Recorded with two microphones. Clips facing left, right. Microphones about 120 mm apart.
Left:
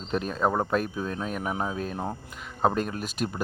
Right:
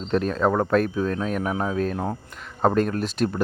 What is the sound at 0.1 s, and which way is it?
Speech, 5° left (ahead or behind).